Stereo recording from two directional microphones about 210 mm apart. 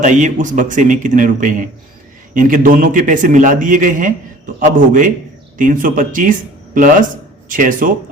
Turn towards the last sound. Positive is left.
turn(degrees=-40)  # may be behind; listen again after turning